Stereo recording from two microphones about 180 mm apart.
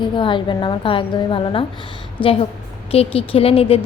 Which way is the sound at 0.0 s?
25° left (ahead or behind).